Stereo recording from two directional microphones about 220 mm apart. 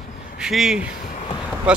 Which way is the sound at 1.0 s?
30° left (ahead or behind).